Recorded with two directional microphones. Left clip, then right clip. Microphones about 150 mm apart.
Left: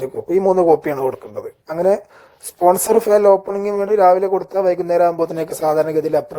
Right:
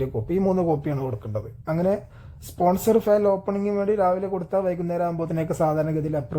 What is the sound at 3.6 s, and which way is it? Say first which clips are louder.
Speech: left 8 dB; 35° left (ahead or behind).